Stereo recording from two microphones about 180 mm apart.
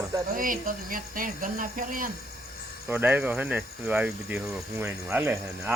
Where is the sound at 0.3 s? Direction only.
50° right (ahead or behind).